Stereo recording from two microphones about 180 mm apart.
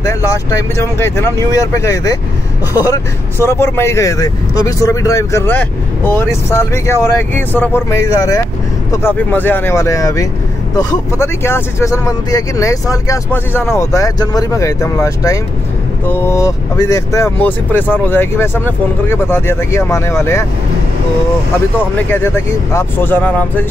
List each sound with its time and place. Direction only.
0.0 s speech: 20° left (ahead or behind)
3.4 s speech: 15° left (ahead or behind)
21.7 s speech: 10° left (ahead or behind)